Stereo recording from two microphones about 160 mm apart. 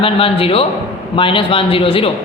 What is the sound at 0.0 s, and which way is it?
A woman's voice, 35° left (ahead or behind).